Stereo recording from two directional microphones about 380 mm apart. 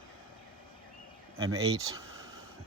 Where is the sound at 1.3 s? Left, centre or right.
Centre.